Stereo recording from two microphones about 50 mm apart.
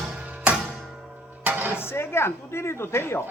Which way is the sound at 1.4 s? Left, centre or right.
Right.